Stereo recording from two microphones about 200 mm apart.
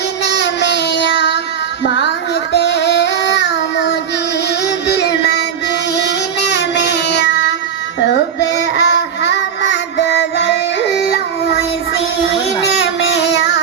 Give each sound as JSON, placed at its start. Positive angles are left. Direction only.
{"t": 0.3, "sound": "child singing", "side_deg": 60}
{"t": 2.5, "sound": "child singing", "side_deg": 60}
{"t": 4.9, "sound": "music", "side_deg": 55}
{"t": 6.5, "sound": "child singing", "side_deg": 60}
{"t": 13.1, "sound": "child singing", "side_deg": 60}